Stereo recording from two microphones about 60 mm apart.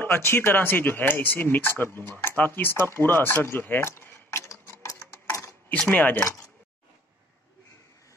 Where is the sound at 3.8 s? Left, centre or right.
Left.